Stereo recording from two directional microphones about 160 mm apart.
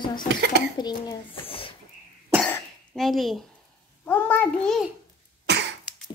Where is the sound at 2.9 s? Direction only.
Centre (ahead or behind).